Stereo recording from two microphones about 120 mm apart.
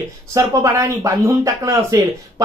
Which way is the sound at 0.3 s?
25° right (ahead or behind).